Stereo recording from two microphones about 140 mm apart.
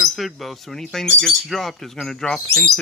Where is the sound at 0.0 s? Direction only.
Centre (ahead or behind).